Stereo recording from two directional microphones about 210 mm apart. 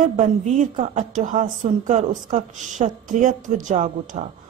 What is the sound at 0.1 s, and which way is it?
A woman's voice, 35° right (ahead or behind).